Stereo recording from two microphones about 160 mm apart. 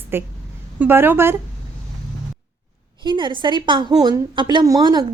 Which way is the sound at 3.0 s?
30° right (ahead or behind).